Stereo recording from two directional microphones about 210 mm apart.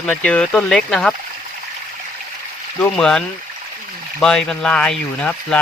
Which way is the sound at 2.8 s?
5° left (ahead or behind).